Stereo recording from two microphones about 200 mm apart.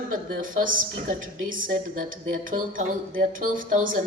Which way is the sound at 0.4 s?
40° right (ahead or behind).